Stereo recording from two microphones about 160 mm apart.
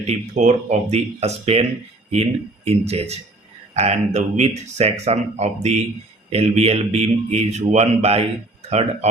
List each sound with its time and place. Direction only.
0.0 s speech: 45° right (ahead or behind)
2.6 s a man's voice: 40° right (ahead or behind)